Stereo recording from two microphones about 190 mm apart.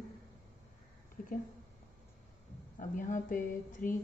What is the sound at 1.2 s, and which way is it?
Speech, 40° left (ahead or behind).